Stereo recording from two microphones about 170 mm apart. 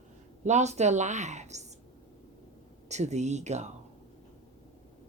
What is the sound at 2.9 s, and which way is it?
Speech, 40° right (ahead or behind).